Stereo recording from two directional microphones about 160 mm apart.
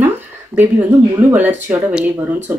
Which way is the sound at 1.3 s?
10° right (ahead or behind).